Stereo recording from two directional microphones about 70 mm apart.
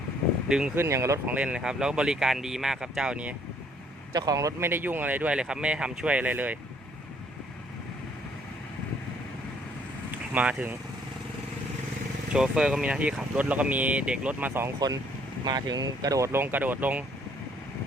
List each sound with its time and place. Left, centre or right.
0.4 s speech: centre
0.8 s speech: right
1.3 s speech: centre
4.1 s speech: right
4.6 s speech: right
10.3 s speech: right
12.3 s speech: centre; by 14.7 s right
15.4 s speech: right
16.3 s speech: right